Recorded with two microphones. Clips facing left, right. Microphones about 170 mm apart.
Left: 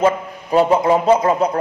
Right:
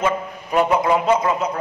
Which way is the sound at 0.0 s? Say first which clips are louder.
Left 5 dB; 30° left (ahead or behind).